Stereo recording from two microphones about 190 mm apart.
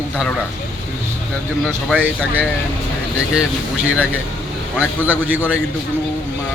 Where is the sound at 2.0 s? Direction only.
10° right (ahead or behind).